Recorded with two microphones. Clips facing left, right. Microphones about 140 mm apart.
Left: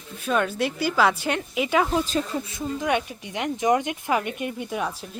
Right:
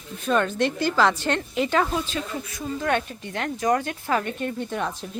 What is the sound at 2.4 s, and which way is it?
Speech, 20° left (ahead or behind).